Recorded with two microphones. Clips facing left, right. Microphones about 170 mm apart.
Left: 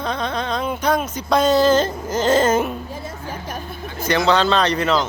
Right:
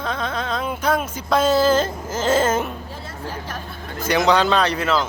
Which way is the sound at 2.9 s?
20° left (ahead or behind).